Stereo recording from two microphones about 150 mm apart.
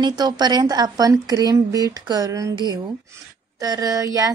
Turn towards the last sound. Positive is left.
turn(degrees=-20)  # may be behind; listen again after turning